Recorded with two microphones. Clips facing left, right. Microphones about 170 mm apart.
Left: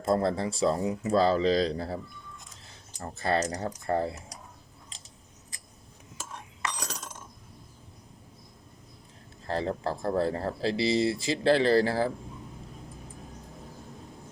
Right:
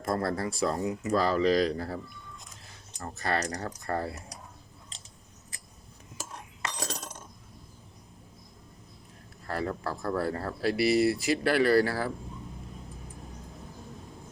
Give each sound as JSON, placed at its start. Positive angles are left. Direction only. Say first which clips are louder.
{"t": 0.0, "sound": "speech", "louder": "left 3 dB", "side_deg": 25}
{"t": 3.0, "sound": "speech", "louder": "left 3 dB", "side_deg": 30}
{"t": 6.9, "sound": "coin", "louder": "right 2 dB", "side_deg": -35}
{"t": 9.5, "sound": "speech", "louder": "left 2 dB", "side_deg": 25}